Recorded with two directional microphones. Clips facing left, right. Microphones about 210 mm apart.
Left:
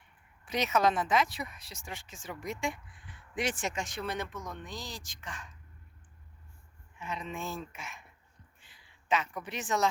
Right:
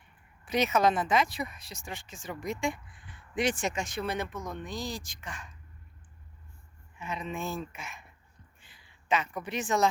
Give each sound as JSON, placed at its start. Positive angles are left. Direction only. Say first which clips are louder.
{"t": 0.4, "sound": "speech", "louder": "right 3 dB", "side_deg": 0}
{"t": 7.0, "sound": "speech", "louder": "right 3 dB", "side_deg": -5}